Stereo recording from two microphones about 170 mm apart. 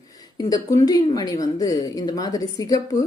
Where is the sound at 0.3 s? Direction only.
20° left (ahead or behind).